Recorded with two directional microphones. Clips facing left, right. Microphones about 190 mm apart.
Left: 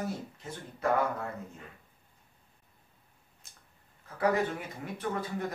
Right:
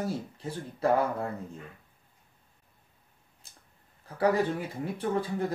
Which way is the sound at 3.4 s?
30° right (ahead or behind).